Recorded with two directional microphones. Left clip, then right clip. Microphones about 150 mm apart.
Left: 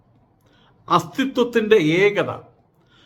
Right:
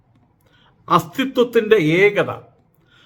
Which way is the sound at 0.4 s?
10° right (ahead or behind).